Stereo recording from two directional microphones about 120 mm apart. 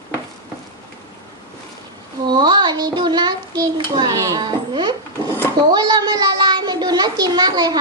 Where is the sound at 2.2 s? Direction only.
40° right (ahead or behind).